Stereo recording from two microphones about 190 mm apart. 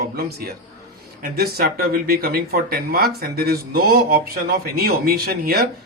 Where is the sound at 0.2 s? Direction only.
55° right (ahead or behind).